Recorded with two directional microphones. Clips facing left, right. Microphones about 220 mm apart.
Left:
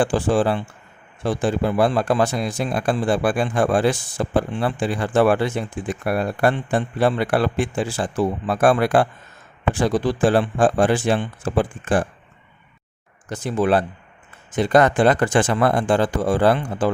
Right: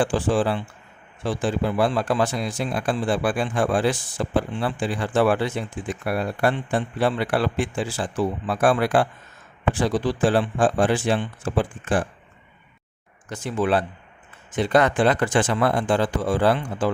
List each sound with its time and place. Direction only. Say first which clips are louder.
0.0 s a man's voice: left 3 dB; 45° left (ahead or behind)
13.2 s a man's voice: left 3 dB; 40° left (ahead or behind)